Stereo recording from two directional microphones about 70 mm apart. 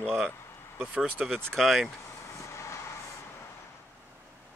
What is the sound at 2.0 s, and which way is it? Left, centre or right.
Vehicle, left.